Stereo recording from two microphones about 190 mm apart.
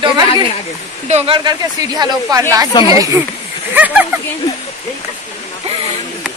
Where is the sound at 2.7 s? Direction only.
25° left (ahead or behind).